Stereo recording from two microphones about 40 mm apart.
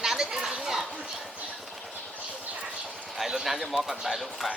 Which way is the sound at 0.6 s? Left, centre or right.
Centre.